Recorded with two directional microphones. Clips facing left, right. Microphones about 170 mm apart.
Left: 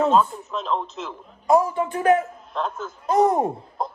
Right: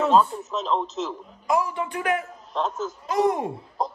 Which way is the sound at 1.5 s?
45° left (ahead or behind).